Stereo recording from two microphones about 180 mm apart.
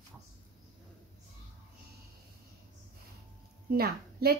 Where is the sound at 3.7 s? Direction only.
60° right (ahead or behind).